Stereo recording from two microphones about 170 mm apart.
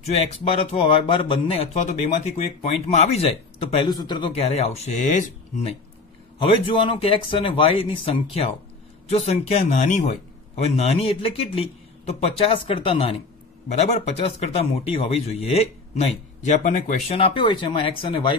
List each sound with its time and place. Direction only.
0.0 s speech: 40° left (ahead or behind)
6.4 s speech: 30° left (ahead or behind); by 16.9 s 50° left (ahead or behind)
17.1 s speech: 30° left (ahead or behind)